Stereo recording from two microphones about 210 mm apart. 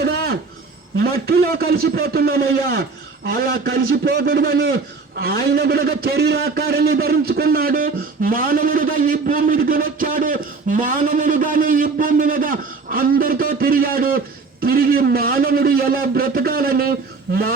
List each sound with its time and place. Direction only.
1.0 s a man's voice: 45° right (ahead or behind)